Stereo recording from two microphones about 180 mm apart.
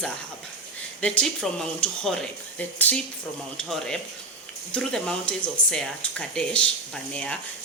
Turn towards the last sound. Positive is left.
turn(degrees=5)  # may be behind; listen again after turning